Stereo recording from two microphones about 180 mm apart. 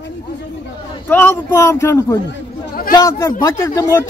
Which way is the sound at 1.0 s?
10° left (ahead or behind).